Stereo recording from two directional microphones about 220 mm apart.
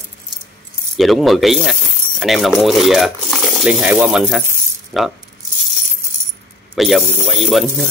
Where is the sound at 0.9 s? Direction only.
Centre (ahead or behind).